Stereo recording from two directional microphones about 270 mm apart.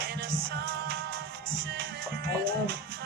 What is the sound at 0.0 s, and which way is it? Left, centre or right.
Music, right.